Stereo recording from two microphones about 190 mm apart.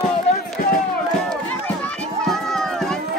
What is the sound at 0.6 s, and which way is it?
Music, 45° left (ahead or behind).